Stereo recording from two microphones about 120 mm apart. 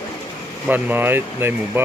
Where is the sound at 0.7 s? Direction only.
15° right (ahead or behind).